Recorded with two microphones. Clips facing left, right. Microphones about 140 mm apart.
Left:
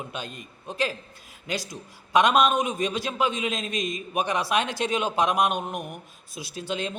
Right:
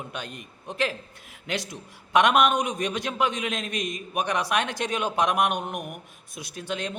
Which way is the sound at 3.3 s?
60° right (ahead or behind).